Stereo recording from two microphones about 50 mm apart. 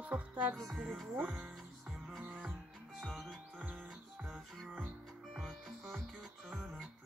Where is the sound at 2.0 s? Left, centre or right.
Right.